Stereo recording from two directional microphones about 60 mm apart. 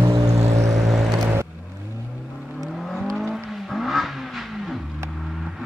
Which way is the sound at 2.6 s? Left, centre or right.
Centre.